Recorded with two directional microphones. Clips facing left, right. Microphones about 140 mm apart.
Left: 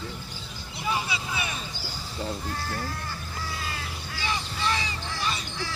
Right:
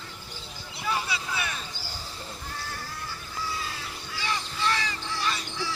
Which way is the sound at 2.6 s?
50° left (ahead or behind).